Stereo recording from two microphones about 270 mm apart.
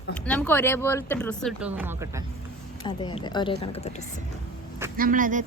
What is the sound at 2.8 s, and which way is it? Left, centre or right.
A woman's voice, centre.